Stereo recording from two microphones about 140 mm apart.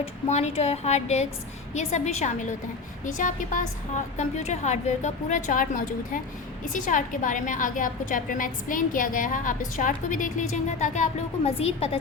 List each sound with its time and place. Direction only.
0.0 s a woman's voice: 50° left (ahead or behind)